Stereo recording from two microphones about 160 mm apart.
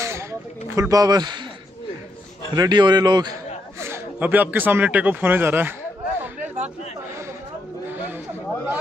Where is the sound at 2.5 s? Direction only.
25° right (ahead or behind).